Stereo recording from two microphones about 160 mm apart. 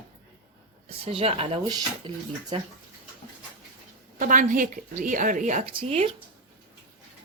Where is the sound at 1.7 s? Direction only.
25° right (ahead or behind).